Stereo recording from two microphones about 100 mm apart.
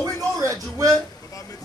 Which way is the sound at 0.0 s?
35° right (ahead or behind).